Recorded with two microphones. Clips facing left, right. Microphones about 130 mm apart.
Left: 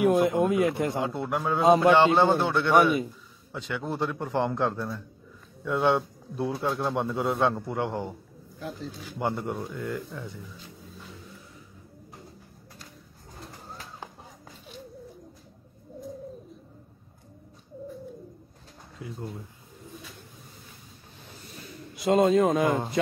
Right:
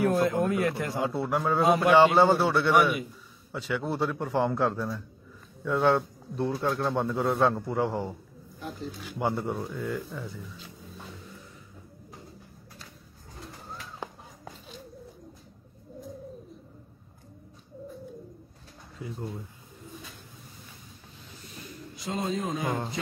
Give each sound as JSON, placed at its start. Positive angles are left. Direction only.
{"t": 0.0, "sound": "a man's voice", "side_deg": 15}
{"t": 1.0, "sound": "a man's voice", "side_deg": 0}
{"t": 9.2, "sound": "a man's voice", "side_deg": -5}
{"t": 18.9, "sound": "speech", "side_deg": 0}
{"t": 21.9, "sound": "a man's voice", "side_deg": 65}